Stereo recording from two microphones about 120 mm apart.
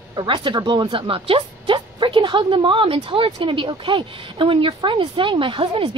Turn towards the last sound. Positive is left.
turn(degrees=-45)  # may be behind; listen again after turning